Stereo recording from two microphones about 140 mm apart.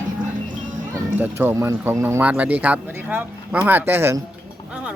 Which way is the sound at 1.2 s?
15° right (ahead or behind).